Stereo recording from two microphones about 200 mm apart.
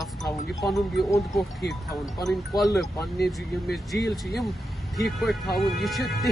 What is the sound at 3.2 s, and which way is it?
Speech, centre (ahead or behind).